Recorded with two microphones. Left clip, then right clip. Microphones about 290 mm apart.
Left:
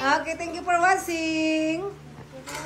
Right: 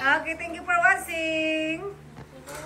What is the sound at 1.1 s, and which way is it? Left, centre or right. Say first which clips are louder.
Child singing: left 1 dB; left.